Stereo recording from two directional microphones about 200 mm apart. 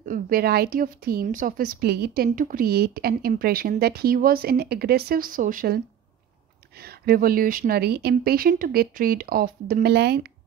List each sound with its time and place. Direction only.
0.0 s speech: 45° right (ahead or behind)
6.8 s speech: 50° right (ahead or behind)